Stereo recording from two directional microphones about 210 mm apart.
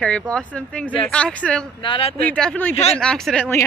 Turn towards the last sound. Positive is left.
turn(degrees=5)  # may be behind; listen again after turning